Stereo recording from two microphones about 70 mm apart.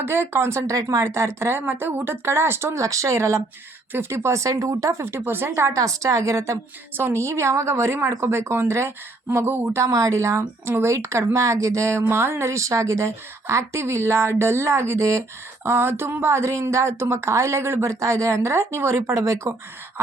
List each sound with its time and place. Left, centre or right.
0.0 s speech: right
0.7 s speech: right
5.1 s speech: right
5.6 s speech: right
6.9 s speech: right
9.8 s speech: right